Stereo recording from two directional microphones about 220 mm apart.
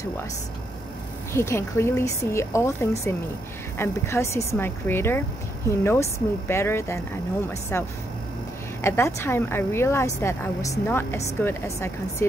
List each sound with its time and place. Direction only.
1.3 s a woman's voice: 10° left (ahead or behind)